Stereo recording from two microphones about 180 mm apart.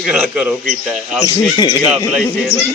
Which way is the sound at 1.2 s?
20° left (ahead or behind).